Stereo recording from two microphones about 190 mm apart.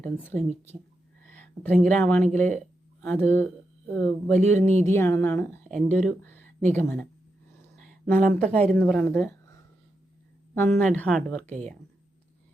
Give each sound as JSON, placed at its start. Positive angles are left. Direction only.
{"t": 0.0, "sound": "speech", "side_deg": 5}
{"t": 1.3, "sound": "a sound", "side_deg": 10}
{"t": 1.8, "sound": "speech", "side_deg": 5}
{"t": 4.5, "sound": "speech", "side_deg": -35}
{"t": 4.8, "sound": "speech", "side_deg": 15}
{"t": 5.7, "sound": "speech", "side_deg": 0}
{"t": 8.1, "sound": "speech", "side_deg": -45}
{"t": 8.7, "sound": "speech", "side_deg": 5}
{"t": 10.8, "sound": "speech", "side_deg": 10}